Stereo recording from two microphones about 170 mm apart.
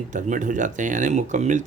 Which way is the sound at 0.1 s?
50° right (ahead or behind).